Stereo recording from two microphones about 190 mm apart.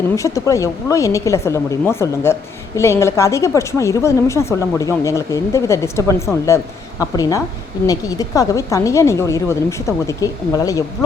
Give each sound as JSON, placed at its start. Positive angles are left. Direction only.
{"t": 0.2, "sound": "speech", "side_deg": 15}